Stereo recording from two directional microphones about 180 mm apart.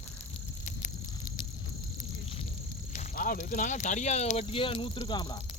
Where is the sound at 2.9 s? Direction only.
50° left (ahead or behind); by 5.4 s 20° left (ahead or behind).